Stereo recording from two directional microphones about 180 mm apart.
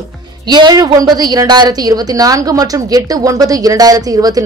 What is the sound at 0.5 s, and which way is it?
A woman's voice, 25° right (ahead or behind).